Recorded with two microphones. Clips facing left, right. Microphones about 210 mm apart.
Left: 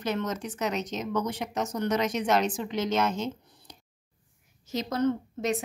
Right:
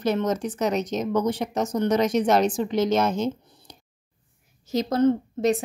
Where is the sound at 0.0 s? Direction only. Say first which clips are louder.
Right 7 dB; 35° right (ahead or behind).